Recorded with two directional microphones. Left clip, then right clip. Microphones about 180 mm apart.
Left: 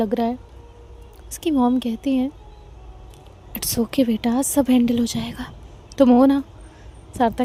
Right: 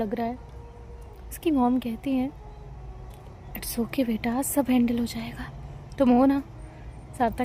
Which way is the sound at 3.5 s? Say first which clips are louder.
Left 7 dB; 55° left (ahead or behind).